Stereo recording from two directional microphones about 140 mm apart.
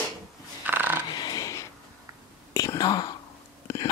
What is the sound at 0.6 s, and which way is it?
Crow, 15° right (ahead or behind).